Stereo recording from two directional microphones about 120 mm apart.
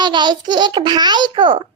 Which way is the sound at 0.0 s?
40° right (ahead or behind).